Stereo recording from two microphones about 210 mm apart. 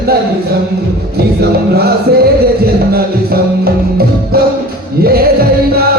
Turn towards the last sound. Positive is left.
turn(degrees=-45)  # may be behind; listen again after turning